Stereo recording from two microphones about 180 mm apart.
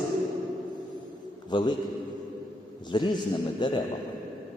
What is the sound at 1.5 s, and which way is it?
Speech, 25° left (ahead or behind).